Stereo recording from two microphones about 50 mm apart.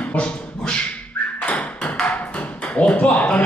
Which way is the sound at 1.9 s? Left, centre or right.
Left.